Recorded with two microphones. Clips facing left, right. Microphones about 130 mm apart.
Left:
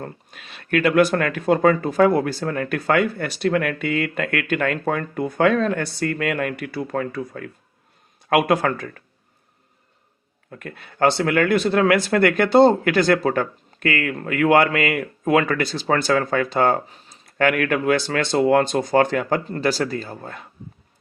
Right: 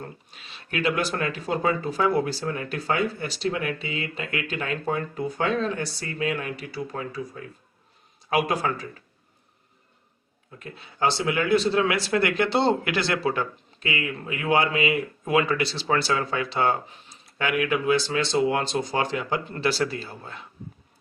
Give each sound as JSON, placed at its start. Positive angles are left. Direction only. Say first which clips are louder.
{"t": 0.0, "sound": "speech", "louder": "left 5 dB", "side_deg": 55}
{"t": 10.5, "sound": "speech", "louder": "left 5 dB", "side_deg": 60}